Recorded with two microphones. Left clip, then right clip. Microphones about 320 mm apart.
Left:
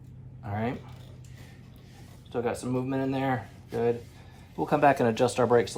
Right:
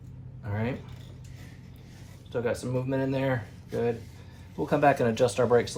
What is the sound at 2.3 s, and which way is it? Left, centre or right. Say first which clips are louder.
Speech: right 1 dB; centre.